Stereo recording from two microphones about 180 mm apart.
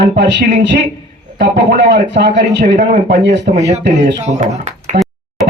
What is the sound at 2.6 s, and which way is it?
Speech, 55° right (ahead or behind).